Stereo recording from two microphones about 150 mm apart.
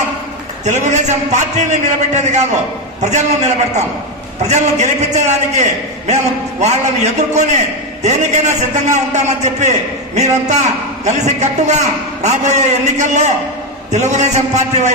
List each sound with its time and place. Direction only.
0.6 s a man's voice: 50° right (ahead or behind)